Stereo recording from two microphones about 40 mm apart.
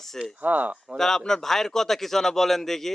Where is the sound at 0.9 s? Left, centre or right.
Centre.